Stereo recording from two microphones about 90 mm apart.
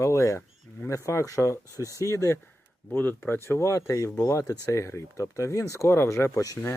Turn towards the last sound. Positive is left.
turn(degrees=35)  # may be behind; listen again after turning